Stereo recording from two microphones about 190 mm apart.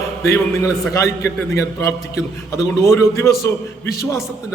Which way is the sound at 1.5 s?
15° left (ahead or behind).